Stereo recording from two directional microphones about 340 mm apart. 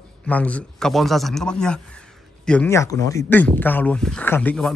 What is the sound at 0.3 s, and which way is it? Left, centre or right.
Speech, centre.